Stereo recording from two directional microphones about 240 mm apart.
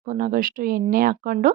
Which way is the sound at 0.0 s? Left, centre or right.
Right.